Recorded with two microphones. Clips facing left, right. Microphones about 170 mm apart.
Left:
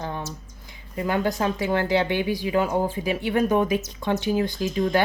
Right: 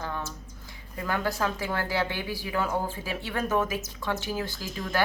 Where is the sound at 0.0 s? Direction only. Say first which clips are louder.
Left 3 dB; 20° left (ahead or behind).